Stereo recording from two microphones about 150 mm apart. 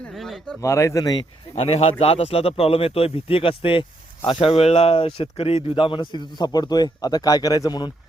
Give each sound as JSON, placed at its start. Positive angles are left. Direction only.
{"t": 0.2, "sound": "speech", "side_deg": 0}
{"t": 0.6, "sound": "speech", "side_deg": 20}
{"t": 1.5, "sound": "speech", "side_deg": 45}